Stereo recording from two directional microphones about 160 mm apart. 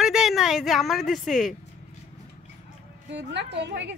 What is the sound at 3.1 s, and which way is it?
Speech, 90° right.